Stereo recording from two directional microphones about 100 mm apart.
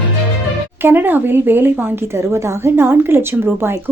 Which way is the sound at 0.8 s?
20° right (ahead or behind).